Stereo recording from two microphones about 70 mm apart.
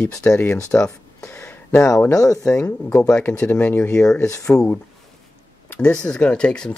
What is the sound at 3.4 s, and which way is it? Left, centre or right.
Speech, left.